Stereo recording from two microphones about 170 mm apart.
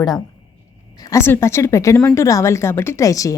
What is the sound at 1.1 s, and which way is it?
A woman's voice, 15° left (ahead or behind).